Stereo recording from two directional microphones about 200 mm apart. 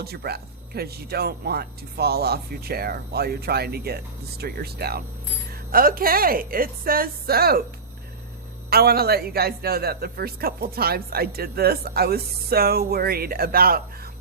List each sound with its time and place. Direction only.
0.0 s a man's voice: 50° right (ahead or behind)
8.7 s a man's voice: 50° right (ahead or behind)